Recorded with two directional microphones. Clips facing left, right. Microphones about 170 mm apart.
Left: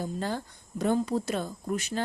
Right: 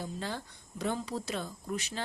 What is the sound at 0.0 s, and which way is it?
Speech, 45° left (ahead or behind).